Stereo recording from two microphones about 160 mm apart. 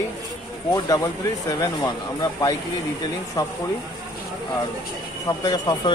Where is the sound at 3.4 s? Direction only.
25° left (ahead or behind).